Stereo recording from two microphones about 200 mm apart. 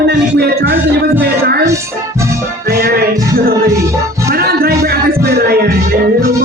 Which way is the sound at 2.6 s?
50° right (ahead or behind).